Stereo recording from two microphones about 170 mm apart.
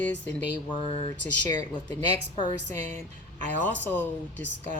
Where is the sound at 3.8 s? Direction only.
10° left (ahead or behind).